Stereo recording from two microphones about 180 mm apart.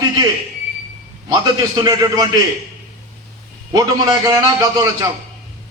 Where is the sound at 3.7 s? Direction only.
20° right (ahead or behind).